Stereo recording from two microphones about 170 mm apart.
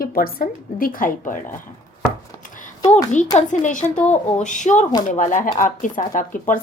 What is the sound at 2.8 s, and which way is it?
Speech, 45° left (ahead or behind).